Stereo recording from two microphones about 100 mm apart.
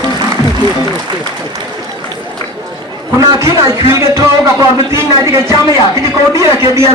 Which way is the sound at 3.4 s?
30° right (ahead or behind).